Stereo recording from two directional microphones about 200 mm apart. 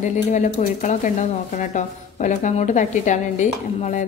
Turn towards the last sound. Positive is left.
turn(degrees=40)  # may be behind; listen again after turning